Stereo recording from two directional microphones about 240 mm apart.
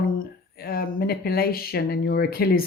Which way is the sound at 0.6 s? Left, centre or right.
Left.